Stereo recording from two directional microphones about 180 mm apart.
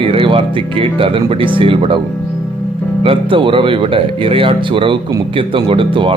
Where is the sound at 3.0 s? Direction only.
30° right (ahead or behind).